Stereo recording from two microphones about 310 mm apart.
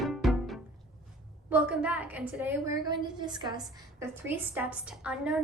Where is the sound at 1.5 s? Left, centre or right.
Centre.